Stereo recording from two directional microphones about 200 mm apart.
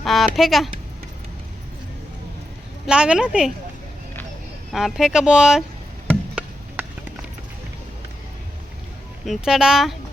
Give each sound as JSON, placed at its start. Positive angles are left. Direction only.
{"t": 0.0, "sound": "speech", "side_deg": 0}
{"t": 2.8, "sound": "speech", "side_deg": -5}
{"t": 4.7, "sound": "speech", "side_deg": 0}
{"t": 6.3, "sound": "chop", "side_deg": -5}
{"t": 9.2, "sound": "speech", "side_deg": 0}